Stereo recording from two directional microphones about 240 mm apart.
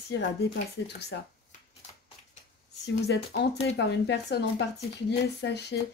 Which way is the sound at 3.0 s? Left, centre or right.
Left.